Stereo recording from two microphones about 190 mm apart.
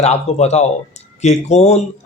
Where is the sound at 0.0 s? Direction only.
35° left (ahead or behind).